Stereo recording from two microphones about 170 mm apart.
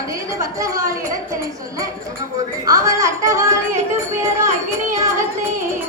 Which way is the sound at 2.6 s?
20° right (ahead or behind).